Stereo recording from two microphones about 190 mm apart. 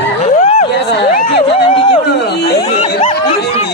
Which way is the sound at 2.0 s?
60° left (ahead or behind).